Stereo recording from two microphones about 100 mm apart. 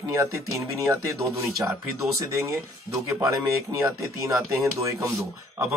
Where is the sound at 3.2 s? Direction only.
30° right (ahead or behind).